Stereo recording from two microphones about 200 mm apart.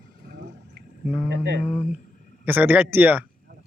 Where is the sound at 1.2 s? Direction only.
60° right (ahead or behind).